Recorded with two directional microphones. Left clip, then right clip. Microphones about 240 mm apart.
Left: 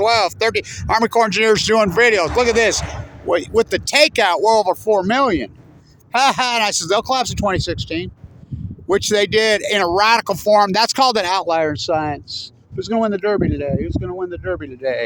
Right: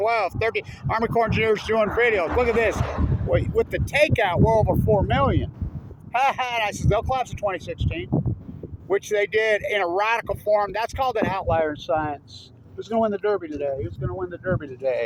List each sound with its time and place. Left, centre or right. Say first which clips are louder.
0.0 s speech: left 7 dB; left
8.9 s speech: left 6 dB; left